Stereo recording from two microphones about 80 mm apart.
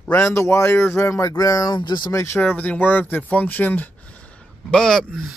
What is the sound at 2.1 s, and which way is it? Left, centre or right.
Speech, left.